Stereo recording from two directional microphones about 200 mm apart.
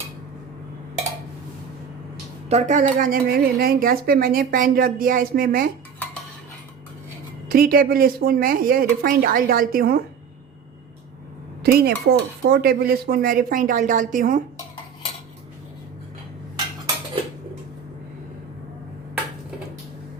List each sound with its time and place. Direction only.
2.5 s a woman's voice: 35° right (ahead or behind)
7.5 s a woman's voice: 45° right (ahead or behind)
11.6 s a woman's voice: 50° right (ahead or behind)